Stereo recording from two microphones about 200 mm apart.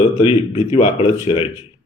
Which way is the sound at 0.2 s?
30° left (ahead or behind).